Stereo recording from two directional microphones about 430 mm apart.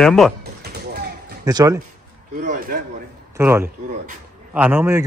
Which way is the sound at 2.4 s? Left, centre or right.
Centre.